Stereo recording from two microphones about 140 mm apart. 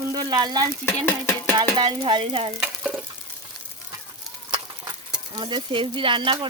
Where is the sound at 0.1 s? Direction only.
30° right (ahead or behind).